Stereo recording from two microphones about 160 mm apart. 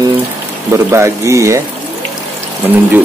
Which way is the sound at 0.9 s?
15° right (ahead or behind).